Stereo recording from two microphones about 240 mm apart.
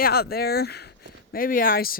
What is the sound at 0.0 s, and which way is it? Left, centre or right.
Speech, left.